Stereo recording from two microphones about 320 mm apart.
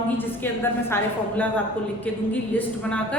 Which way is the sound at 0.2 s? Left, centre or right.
Centre.